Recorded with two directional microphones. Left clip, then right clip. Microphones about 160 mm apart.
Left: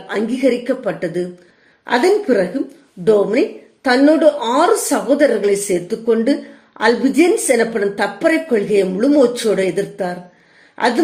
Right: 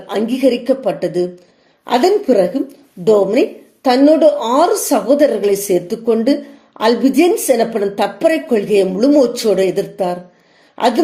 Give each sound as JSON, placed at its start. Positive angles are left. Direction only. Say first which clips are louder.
{"t": 0.1, "sound": "a woman's voice", "louder": "right 2 dB", "side_deg": -20}